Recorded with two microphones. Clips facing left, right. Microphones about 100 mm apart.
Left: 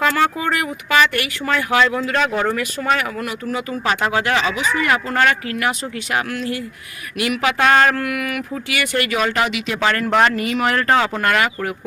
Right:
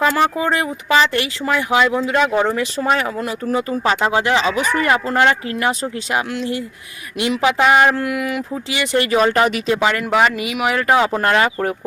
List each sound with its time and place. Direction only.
0.1 s speech: 25° right (ahead or behind)
2.9 s speech: 30° right (ahead or behind)
4.5 s speech: 55° right (ahead or behind)
4.9 s speech: 25° right (ahead or behind)
7.6 s speech: 15° right (ahead or behind); by 9.7 s 35° right (ahead or behind)
9.8 s speech: 15° right (ahead or behind)
11.2 s speech: 30° right (ahead or behind)